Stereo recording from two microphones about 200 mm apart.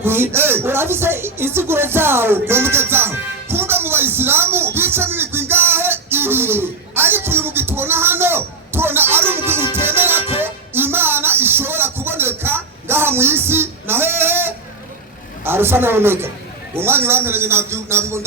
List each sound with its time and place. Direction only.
0.0 s speech: 10° right (ahead or behind)
3.5 s a sound: 10° right (ahead or behind)
9.7 s music: 10° right (ahead or behind)
15.4 s speech: 10° right (ahead or behind)